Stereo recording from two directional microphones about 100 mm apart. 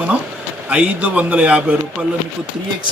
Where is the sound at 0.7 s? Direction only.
10° right (ahead or behind).